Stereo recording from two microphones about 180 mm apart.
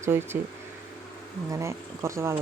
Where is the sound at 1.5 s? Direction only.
15° right (ahead or behind).